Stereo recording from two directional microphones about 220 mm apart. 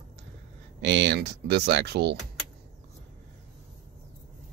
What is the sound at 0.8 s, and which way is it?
Speech, 50° right (ahead or behind).